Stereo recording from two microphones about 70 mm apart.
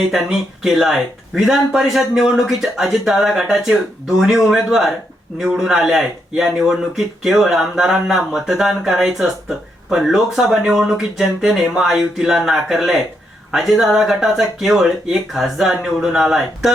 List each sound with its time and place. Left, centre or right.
0.1 s a man's voice: centre